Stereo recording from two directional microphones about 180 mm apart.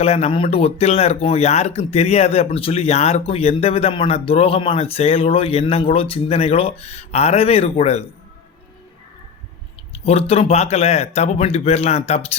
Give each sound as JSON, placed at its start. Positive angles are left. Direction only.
{"t": 0.0, "sound": "speech", "side_deg": 35}
{"t": 10.1, "sound": "speech", "side_deg": 35}